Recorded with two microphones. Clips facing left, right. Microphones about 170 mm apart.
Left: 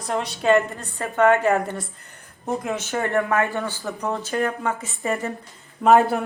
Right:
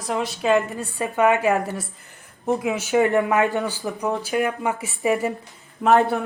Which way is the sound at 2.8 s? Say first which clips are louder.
Right 5 dB; 15° right (ahead or behind).